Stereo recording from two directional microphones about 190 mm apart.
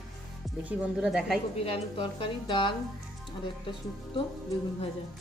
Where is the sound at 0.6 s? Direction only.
5° right (ahead or behind).